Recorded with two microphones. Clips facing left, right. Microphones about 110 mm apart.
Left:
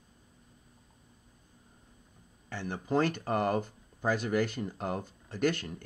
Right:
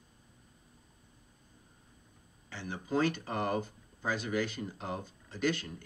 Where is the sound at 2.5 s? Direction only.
50° left (ahead or behind).